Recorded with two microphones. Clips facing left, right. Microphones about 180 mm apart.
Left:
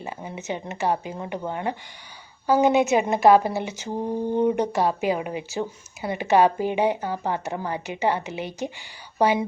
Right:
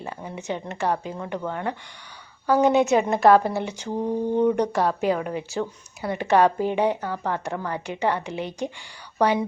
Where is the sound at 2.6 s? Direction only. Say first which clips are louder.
Right 2 dB; 5° left (ahead or behind).